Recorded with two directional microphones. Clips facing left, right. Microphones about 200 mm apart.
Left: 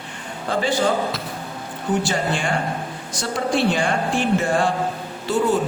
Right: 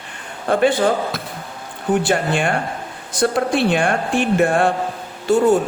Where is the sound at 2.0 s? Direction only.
55° right (ahead or behind).